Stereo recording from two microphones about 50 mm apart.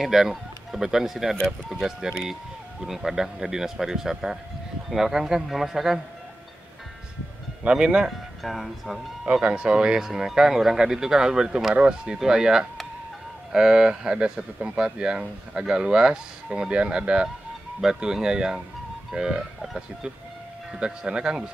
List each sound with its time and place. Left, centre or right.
0.0 s speech: centre
7.6 s speech: centre
8.4 s speech: centre
9.3 s speech: centre
20.8 s speech: centre